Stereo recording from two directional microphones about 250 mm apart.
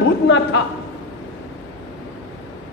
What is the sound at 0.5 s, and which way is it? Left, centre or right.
Speech, left.